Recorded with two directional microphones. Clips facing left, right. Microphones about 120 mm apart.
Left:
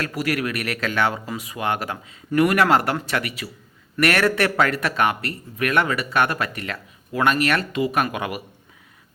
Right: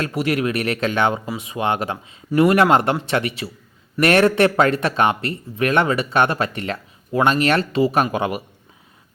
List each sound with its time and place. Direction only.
0.0 s speech: 25° right (ahead or behind)